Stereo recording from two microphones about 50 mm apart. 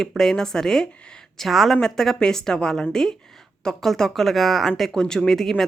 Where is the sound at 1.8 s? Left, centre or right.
Centre.